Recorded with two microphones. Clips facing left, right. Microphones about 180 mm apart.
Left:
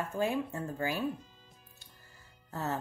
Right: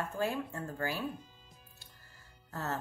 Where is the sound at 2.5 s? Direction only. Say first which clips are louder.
Left 2 dB; 15° left (ahead or behind).